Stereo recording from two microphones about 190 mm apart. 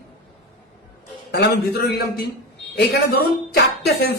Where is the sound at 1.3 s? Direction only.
55° left (ahead or behind).